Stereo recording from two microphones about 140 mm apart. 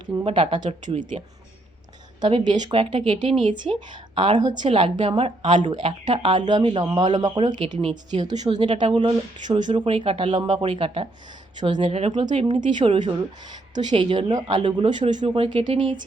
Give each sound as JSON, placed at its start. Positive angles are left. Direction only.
{"t": 0.3, "sound": "a woman's voice", "side_deg": -40}
{"t": 2.2, "sound": "a woman's voice", "side_deg": -30}
{"t": 2.7, "sound": "a woman's voice", "side_deg": -40}
{"t": 4.7, "sound": "a woman's voice", "side_deg": -40}
{"t": 12.6, "sound": "a woman's voice", "side_deg": -35}